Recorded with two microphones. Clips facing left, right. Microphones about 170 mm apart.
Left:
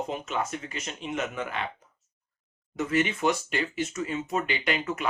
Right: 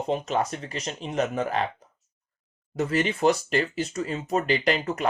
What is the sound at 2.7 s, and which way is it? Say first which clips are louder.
Speech: right 1 dB; 35° right (ahead or behind).